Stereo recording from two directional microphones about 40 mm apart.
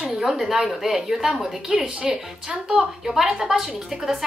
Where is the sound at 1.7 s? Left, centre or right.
Right.